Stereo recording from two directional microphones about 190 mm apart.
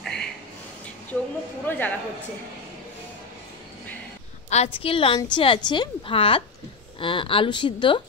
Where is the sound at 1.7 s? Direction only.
10° left (ahead or behind).